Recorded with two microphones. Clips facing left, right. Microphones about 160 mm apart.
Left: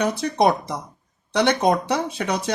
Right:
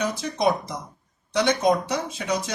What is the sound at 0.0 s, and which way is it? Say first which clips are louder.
Speech: left 4 dB; 60° left (ahead or behind).